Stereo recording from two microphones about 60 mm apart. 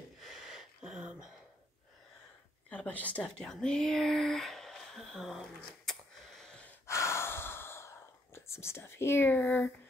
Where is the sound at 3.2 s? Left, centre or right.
Centre.